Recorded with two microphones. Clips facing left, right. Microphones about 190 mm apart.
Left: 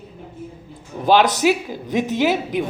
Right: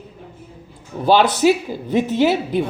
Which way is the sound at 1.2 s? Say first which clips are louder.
Right 2 dB; 15° left (ahead or behind).